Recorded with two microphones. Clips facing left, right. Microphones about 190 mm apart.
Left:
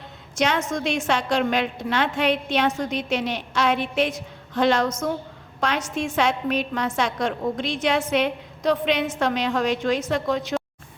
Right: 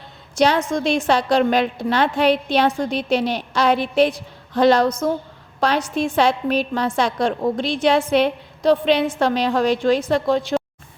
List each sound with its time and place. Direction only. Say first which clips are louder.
0.3 s a woman's voice: right 5 dB; 35° right (ahead or behind)